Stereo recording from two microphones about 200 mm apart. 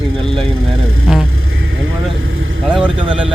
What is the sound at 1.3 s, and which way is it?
Vehicle, 90° right.